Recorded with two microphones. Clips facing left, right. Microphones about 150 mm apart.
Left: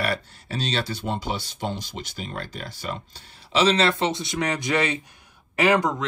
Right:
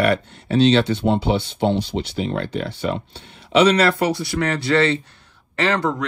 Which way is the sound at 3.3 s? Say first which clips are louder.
Right 6 dB; 30° left (ahead or behind).